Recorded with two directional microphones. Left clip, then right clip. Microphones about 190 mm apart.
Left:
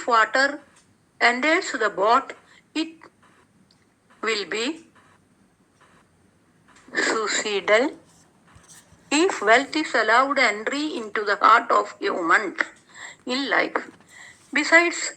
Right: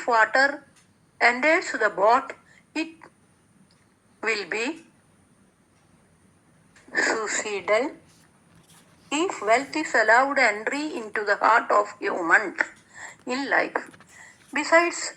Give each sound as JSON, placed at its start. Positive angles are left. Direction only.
{"t": 0.0, "sound": "a woman's voice", "side_deg": 20}
{"t": 4.2, "sound": "a woman's voice", "side_deg": 20}
{"t": 6.9, "sound": "a woman's voice", "side_deg": 20}
{"t": 9.0, "sound": "a woman's voice", "side_deg": 30}
{"t": 14.5, "sound": "a woman's voice", "side_deg": 45}